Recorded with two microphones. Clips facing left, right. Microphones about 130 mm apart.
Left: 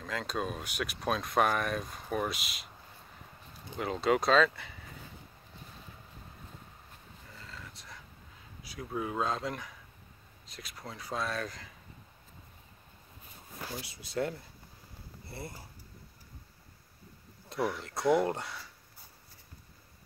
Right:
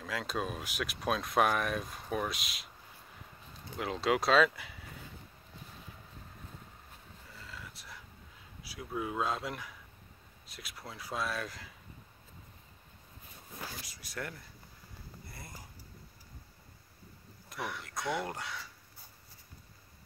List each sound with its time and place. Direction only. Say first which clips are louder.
0.0 s speech: left 1 dB; 5° right (ahead or behind)
3.7 s speech: left 2 dB; centre (ahead or behind)
7.3 s dog: even; 5° right (ahead or behind)
8.6 s speech: left 1 dB; 5° right (ahead or behind)
13.8 s speech: left 8 dB; 25° left (ahead or behind)
17.5 s speech: left 7 dB; 30° left (ahead or behind)